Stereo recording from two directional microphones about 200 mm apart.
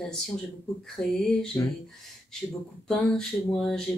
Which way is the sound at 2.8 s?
5° left (ahead or behind).